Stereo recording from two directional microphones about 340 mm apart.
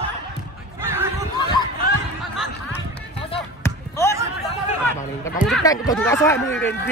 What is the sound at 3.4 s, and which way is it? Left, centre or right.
Basketball bounce, centre.